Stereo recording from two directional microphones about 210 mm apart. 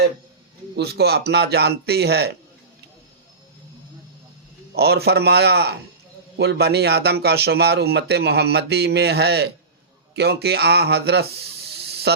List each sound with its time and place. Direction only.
0.8 s a man's voice: 50° right (ahead or behind)
4.7 s a man's voice: 50° right (ahead or behind)
11.7 s water: 50° right (ahead or behind)